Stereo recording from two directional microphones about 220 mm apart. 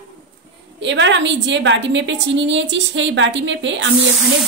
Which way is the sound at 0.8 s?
55° right (ahead or behind).